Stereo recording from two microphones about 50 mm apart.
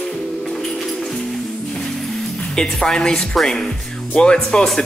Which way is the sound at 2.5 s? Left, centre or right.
Centre.